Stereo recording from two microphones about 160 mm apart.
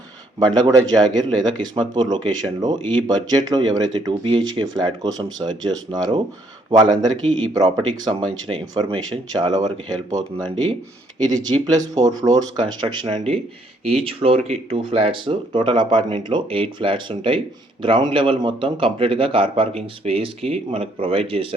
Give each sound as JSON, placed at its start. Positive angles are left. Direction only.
{"t": 0.3, "sound": "a man's voice", "side_deg": -25}